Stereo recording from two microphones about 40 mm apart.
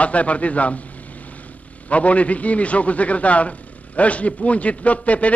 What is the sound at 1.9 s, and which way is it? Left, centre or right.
A man's voice, left.